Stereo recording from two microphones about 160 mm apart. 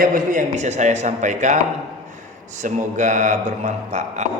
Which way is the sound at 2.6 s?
50° right (ahead or behind).